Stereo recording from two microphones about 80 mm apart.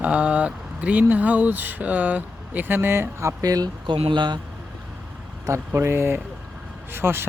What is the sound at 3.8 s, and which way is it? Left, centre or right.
Speech, right.